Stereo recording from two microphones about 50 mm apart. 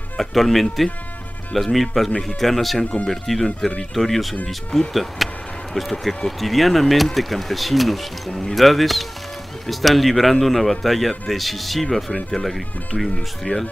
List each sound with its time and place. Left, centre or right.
0.2 s speech: centre
2.0 s speech: centre
2.4 s speech: centre
2.8 s speech: left
3.1 s speech: centre
8.3 s speech: centre
8.5 s speech: centre